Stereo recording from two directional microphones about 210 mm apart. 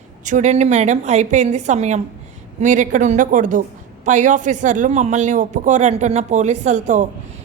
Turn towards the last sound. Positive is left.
turn(degrees=-35)  # may be behind; listen again after turning